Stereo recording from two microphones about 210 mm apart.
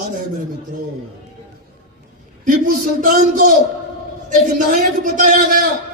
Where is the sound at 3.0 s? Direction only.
40° right (ahead or behind).